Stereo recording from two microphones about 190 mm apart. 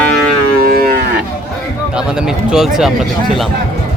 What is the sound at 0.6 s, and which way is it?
Moo, 50° right (ahead or behind).